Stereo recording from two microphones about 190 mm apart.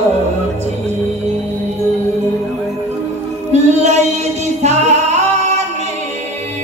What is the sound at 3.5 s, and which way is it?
Singing, 35° right (ahead or behind).